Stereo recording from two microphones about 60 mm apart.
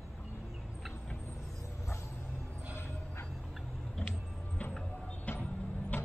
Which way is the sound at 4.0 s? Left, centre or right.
Centre.